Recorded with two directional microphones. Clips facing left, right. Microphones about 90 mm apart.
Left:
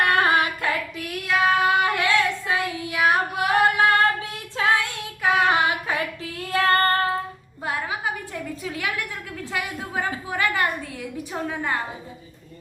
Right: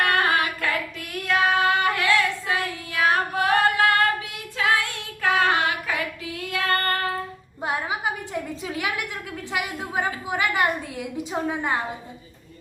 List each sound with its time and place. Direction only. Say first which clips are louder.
0.1 s child singing: left 2 dB; 20° left (ahead or behind)
1.3 s child singing: even; centre (ahead or behind)
1.7 s child singing: left 1 dB; 20° left (ahead or behind)
3.0 s singing: even; 15° left (ahead or behind)
3.6 s female singing: left 4 dB; 20° left (ahead or behind)
5.4 s child singing: left 2 dB; 20° left (ahead or behind)
6.3 s female singing: left 5 dB; 35° left (ahead or behind)
7.6 s a sound: right 1 dB; 20° right (ahead or behind)
9.5 s a woman's voice: right 1 dB; 20° right (ahead or behind)